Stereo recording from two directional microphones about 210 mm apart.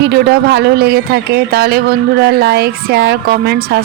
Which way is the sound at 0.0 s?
50° right (ahead or behind).